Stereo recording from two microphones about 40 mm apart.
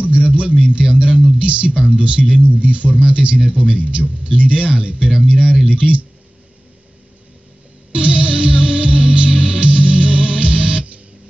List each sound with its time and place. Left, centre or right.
0.0 s a man's voice: right
7.9 s music: right